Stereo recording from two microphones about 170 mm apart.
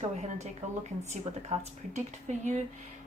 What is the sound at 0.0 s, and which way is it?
Speech, 40° right (ahead or behind).